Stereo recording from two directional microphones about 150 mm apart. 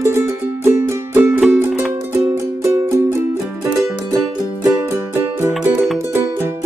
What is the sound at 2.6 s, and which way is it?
Music, 20° right (ahead or behind).